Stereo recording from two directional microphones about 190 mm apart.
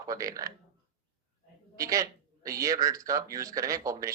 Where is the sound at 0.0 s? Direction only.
15° right (ahead or behind).